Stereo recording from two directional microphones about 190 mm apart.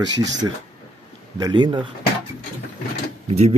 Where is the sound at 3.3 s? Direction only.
35° right (ahead or behind).